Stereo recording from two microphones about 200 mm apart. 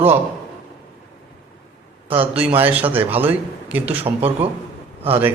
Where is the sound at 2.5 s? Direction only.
10° right (ahead or behind).